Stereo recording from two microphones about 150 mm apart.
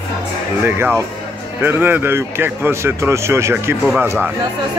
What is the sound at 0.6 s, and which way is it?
Speech, 15° right (ahead or behind).